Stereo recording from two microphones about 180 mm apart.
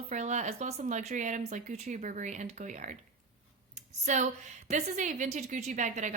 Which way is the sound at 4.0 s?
40° right (ahead or behind).